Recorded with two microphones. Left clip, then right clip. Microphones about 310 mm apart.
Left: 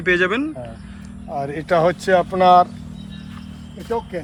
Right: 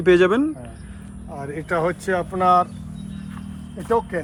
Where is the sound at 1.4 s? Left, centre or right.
Left.